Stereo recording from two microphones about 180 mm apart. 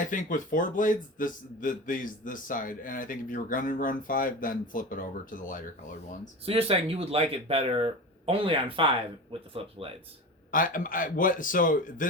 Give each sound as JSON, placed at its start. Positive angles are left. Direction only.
{"t": 0.1, "sound": "a man's voice", "side_deg": 45}
{"t": 6.4, "sound": "speech", "side_deg": -30}
{"t": 10.5, "sound": "a man's voice", "side_deg": 50}